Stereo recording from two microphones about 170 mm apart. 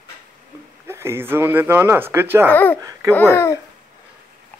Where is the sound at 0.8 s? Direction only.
15° right (ahead or behind).